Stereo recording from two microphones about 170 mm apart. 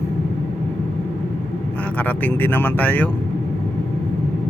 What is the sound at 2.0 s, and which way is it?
Speech, 10° left (ahead or behind).